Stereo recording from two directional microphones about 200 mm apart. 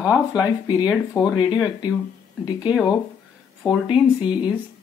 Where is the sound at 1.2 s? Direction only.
15° left (ahead or behind).